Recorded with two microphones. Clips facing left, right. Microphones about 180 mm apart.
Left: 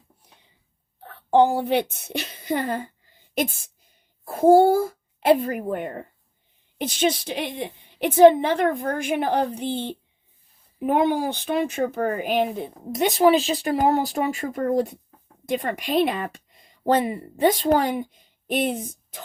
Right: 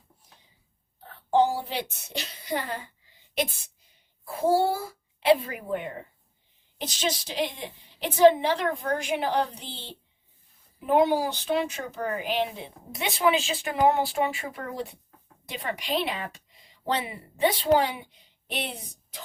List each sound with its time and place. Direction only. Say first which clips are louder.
0.9 s a woman's voice: left 5 dB; 60° left (ahead or behind)